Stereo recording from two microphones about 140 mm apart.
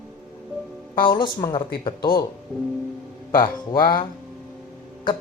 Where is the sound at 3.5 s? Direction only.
30° left (ahead or behind).